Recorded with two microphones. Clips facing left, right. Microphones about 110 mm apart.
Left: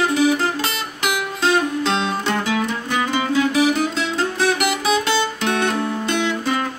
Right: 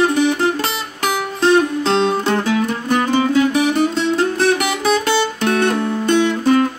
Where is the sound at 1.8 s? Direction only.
40° right (ahead or behind).